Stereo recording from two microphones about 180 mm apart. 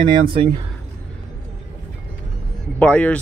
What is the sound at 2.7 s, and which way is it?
Speech, 10° left (ahead or behind).